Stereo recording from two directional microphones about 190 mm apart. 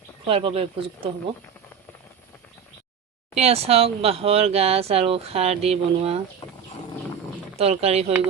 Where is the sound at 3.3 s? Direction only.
35° right (ahead or behind).